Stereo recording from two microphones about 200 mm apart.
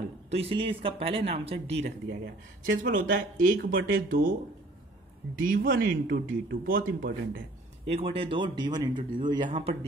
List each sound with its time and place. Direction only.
0.3 s a man's voice: 30° right (ahead or behind)
2.0 s speech: 50° right (ahead or behind)
5.4 s speech: 45° right (ahead or behind)
7.8 s a man's voice: 30° right (ahead or behind)